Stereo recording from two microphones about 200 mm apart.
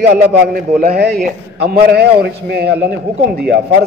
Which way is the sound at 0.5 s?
45° right (ahead or behind).